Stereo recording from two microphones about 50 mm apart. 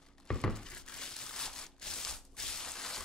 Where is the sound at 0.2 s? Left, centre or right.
Centre.